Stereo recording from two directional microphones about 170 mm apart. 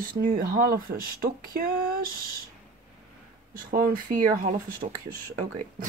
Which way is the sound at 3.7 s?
55° right (ahead or behind).